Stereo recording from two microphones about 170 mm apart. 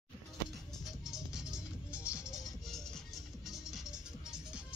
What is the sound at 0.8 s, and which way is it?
Music, centre (ahead or behind).